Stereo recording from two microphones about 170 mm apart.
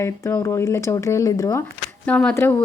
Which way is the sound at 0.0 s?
15° left (ahead or behind).